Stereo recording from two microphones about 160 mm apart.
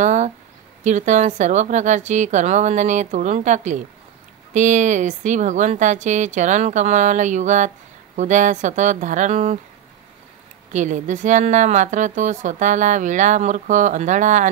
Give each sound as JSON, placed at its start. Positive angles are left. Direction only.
{"t": 0.0, "sound": "speech", "side_deg": -45}
{"t": 10.7, "sound": "speech", "side_deg": -50}